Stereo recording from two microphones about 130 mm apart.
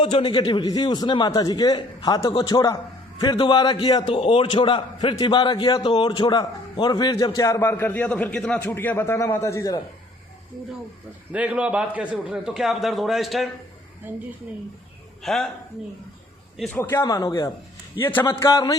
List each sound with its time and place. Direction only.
0.0 s a man's voice: 40° left (ahead or behind)
5.8 s a man's voice: 50° left (ahead or behind)
6.1 s a man's voice: 35° left (ahead or behind)
11.3 s a man's voice: 10° right (ahead or behind)
14.0 s a woman's voice: 15° right (ahead or behind)
15.2 s speech: centre (ahead or behind)
16.7 s a man's voice: 15° left (ahead or behind)
17.0 s a man's voice: 25° left (ahead or behind)
18.0 s a man's voice: 15° left (ahead or behind)
18.3 s a man's voice: 30° left (ahead or behind)